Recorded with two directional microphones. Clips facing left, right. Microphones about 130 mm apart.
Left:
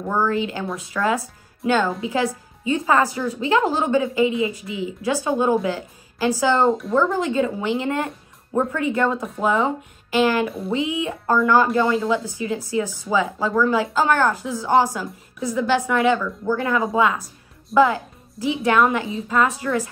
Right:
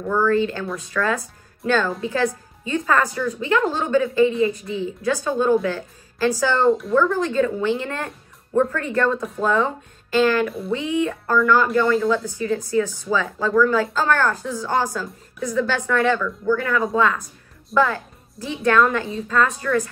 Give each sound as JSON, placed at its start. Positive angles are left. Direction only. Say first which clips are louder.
{"t": 0.1, "sound": "a woman's voice", "louder": "right 3 dB", "side_deg": 15}